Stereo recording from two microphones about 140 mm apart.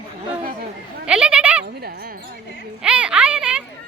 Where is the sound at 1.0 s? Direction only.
5° right (ahead or behind).